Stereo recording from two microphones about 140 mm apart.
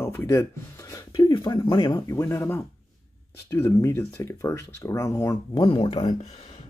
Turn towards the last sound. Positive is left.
turn(degrees=45)  # may be behind; listen again after turning